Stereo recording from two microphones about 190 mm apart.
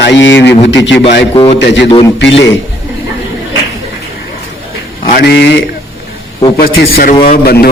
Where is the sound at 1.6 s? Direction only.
70° left (ahead or behind).